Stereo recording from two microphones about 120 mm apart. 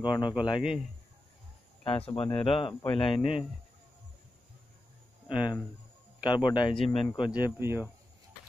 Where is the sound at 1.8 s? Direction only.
50° left (ahead or behind).